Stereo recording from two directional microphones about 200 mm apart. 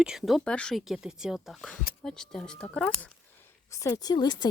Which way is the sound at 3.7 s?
15° left (ahead or behind).